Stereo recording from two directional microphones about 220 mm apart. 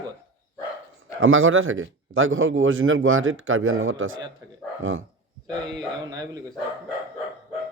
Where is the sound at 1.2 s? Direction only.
65° right (ahead or behind).